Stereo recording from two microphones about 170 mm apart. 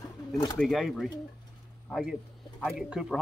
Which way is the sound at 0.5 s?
Centre (ahead or behind).